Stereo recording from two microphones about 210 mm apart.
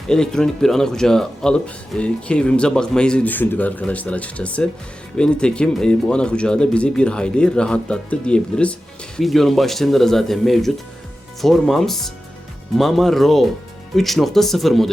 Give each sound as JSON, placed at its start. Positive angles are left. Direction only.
{"t": 0.1, "sound": "speech", "side_deg": 5}